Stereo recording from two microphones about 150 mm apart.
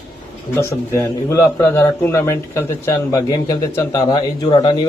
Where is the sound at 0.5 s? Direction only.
20° left (ahead or behind).